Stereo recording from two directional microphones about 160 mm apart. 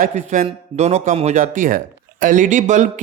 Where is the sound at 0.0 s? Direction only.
50° right (ahead or behind).